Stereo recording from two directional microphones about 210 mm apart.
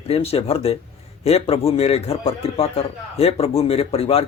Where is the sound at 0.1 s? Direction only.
30° left (ahead or behind).